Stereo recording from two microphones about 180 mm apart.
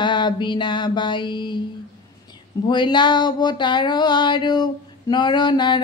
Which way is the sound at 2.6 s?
25° left (ahead or behind).